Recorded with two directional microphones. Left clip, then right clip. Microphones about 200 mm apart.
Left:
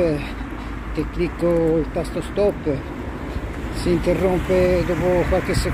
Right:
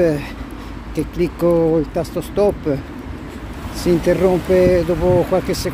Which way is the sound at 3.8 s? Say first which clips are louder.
Right 4 dB; 40° right (ahead or behind).